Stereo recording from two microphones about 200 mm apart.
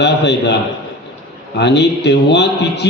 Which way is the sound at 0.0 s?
60° left (ahead or behind).